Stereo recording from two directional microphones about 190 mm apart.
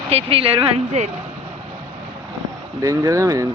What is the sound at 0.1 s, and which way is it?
Speech, 30° right (ahead or behind).